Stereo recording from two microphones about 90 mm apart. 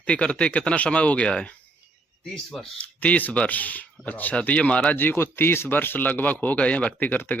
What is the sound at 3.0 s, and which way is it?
Speech, 15° left (ahead or behind).